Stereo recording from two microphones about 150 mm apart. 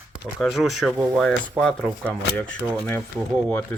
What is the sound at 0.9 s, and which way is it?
Speech, 10° right (ahead or behind).